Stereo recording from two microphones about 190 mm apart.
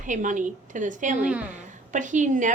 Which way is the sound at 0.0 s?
40° right (ahead or behind).